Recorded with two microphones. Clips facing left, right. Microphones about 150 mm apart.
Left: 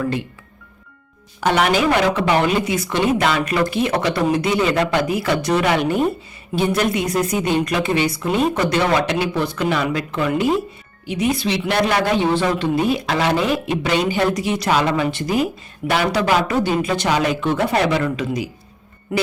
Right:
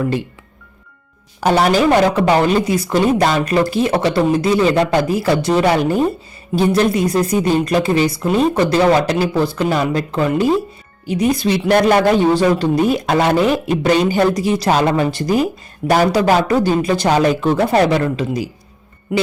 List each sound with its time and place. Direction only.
1.4 s speech: 35° right (ahead or behind)